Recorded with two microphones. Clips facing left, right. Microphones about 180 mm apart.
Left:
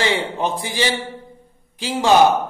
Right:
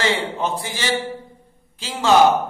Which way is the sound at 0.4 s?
15° left (ahead or behind).